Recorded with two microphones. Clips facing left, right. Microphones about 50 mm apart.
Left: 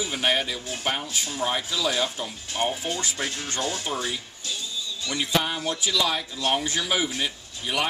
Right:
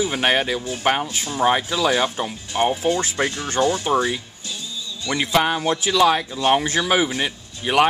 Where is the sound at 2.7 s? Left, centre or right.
Right.